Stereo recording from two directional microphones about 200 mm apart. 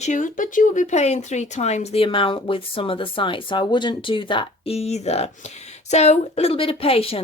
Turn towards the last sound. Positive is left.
turn(degrees=30)  # may be behind; listen again after turning